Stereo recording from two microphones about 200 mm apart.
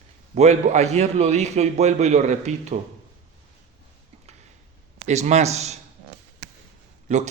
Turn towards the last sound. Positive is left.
turn(degrees=-35)  # may be behind; listen again after turning